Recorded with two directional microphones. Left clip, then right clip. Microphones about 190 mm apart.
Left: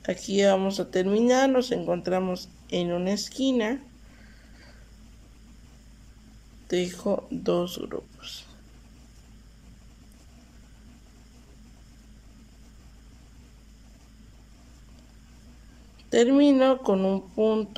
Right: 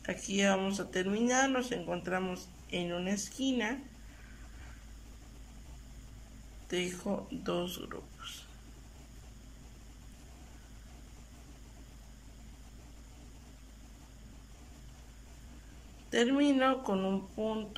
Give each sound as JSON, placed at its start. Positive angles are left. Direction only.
{"t": 0.0, "sound": "speech", "side_deg": 25}
{"t": 6.7, "sound": "speech", "side_deg": 25}
{"t": 16.1, "sound": "speech", "side_deg": 25}